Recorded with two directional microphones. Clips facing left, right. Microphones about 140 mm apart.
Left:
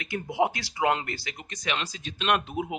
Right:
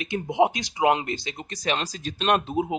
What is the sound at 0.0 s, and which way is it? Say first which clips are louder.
Speech: right 4 dB; 20° right (ahead or behind).